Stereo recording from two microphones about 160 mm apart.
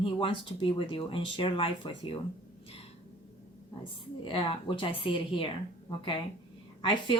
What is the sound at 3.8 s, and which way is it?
Speech, 30° left (ahead or behind).